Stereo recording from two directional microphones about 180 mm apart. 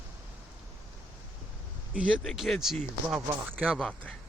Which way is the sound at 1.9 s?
5° right (ahead or behind).